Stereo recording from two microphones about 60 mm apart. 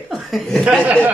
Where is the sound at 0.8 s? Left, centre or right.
Right.